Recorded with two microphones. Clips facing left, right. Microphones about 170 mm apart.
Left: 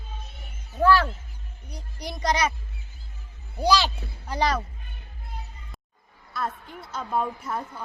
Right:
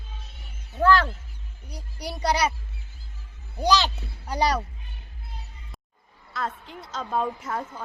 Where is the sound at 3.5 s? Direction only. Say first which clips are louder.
Even; 10° left (ahead or behind).